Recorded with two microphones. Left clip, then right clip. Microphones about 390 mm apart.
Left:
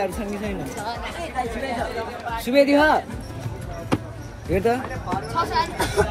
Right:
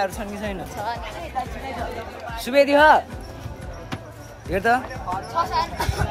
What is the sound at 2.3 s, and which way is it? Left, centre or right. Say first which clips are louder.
Speech: right 1 dB; centre.